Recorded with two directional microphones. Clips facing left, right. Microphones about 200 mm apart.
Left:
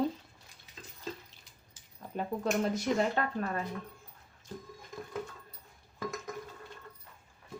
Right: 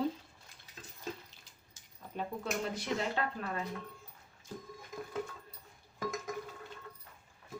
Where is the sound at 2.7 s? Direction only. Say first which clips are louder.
Left 5 dB; 45° left (ahead or behind).